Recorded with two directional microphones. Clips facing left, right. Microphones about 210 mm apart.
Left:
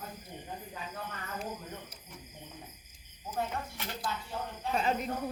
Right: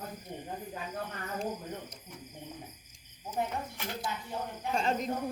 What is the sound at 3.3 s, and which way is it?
Speech, 15° right (ahead or behind).